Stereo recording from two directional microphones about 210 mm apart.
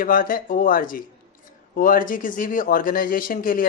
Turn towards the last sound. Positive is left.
turn(degrees=40)  # may be behind; listen again after turning